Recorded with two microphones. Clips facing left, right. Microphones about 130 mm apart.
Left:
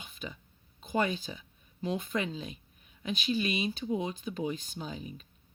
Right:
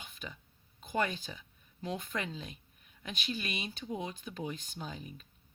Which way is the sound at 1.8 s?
30° left (ahead or behind).